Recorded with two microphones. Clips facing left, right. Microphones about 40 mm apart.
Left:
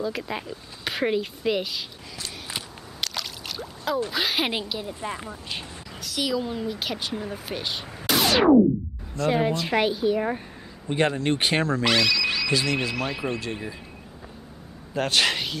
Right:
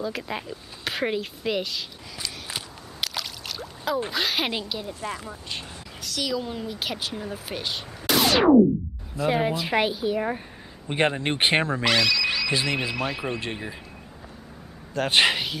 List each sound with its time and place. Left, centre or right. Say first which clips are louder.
0.0 s speech: left 1 dB; centre
2.5 s a sound: even; centre
4.1 s speech: left 1 dB; centre
5.0 s speech: even; centre
6.0 s speech: left 2 dB; centre
10.9 s speech: left 1 dB; right
11.8 s a sound: even; centre
12.7 s speech: even; centre
15.0 s speech: right 3 dB; right
15.3 s speech: even; centre